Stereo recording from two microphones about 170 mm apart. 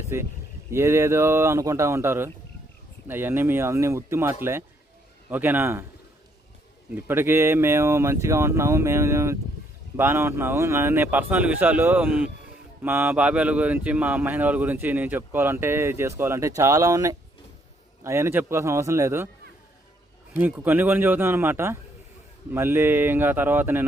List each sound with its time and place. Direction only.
0.1 s speech: 15° right (ahead or behind)
6.9 s speech: 15° right (ahead or behind)
20.3 s speech: 10° right (ahead or behind)